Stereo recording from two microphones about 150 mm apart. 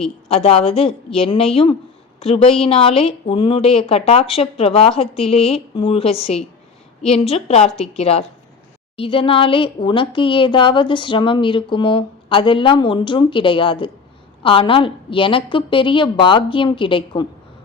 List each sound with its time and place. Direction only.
0.3 s a woman's voice: 40° left (ahead or behind)